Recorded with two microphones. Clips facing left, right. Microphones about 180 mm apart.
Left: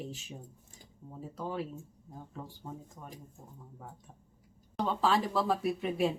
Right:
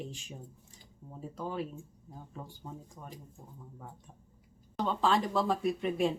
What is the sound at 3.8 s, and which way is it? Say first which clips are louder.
Speech: even; 5° left (ahead or behind).